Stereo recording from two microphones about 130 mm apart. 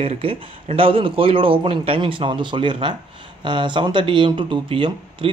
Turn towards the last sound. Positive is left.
turn(degrees=-45)  # may be behind; listen again after turning